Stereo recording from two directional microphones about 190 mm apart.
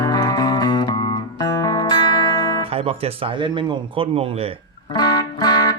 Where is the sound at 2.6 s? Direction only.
30° right (ahead or behind).